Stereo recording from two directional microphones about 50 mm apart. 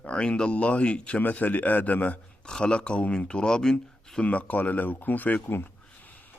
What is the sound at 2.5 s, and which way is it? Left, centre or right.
Speech, centre.